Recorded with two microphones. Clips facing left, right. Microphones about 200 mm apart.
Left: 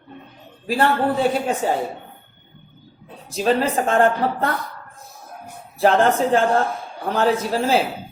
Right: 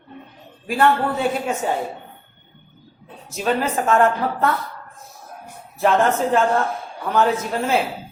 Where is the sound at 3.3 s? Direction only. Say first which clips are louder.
Left 2 dB; 30° left (ahead or behind).